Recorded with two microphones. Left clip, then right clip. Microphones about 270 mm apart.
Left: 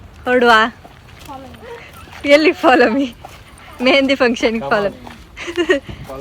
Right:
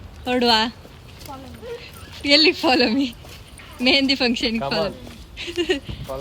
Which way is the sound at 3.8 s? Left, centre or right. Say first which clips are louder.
Left 5 dB; left.